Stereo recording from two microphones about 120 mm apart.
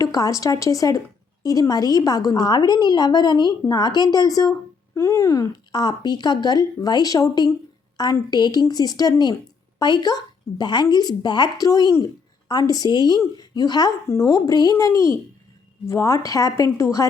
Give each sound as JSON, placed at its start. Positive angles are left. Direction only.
{"t": 0.0, "sound": "a woman's voice", "side_deg": 30}